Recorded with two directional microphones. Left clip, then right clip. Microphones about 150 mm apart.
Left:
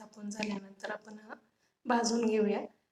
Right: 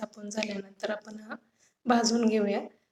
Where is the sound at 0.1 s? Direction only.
15° right (ahead or behind).